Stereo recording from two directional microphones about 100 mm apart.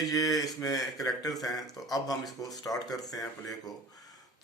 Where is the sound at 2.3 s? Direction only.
35° left (ahead or behind).